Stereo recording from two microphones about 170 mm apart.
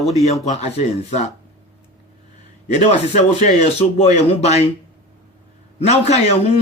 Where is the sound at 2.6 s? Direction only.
40° left (ahead or behind).